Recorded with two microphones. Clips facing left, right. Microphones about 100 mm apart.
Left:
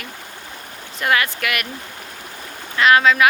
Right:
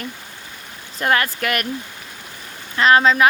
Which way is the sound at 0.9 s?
40° right (ahead or behind).